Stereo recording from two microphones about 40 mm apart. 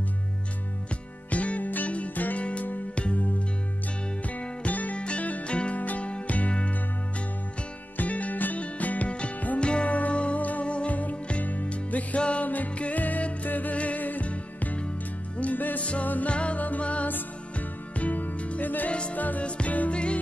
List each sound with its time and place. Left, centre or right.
1.3 s music: left
8.0 s music: left
12.9 s music: left
15.5 s music: left
15.8 s music: left
18.9 s music: left
19.1 s music: left
19.4 s music: left